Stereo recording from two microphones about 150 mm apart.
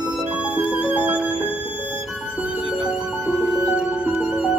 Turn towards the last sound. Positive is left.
turn(degrees=-5)  # may be behind; listen again after turning